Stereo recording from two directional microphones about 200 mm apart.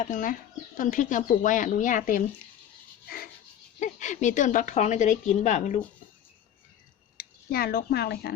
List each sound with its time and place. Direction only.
0.0 s a woman's voice: 40° left (ahead or behind)
3.1 s a sound: 50° left (ahead or behind)
3.8 s a woman's voice: 40° left (ahead or behind)
7.2 s speech: 50° left (ahead or behind)